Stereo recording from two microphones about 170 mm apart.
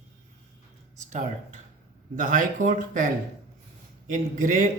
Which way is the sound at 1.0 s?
45° right (ahead or behind).